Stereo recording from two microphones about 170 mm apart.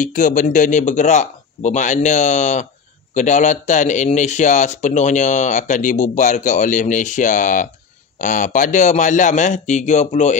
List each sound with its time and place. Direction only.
0.0 s speech: 50° left (ahead or behind)